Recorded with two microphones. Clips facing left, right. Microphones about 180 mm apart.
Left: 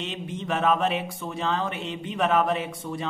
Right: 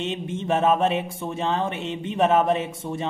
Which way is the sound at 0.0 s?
25° right (ahead or behind).